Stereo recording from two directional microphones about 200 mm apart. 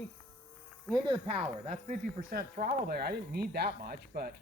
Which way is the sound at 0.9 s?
20° right (ahead or behind).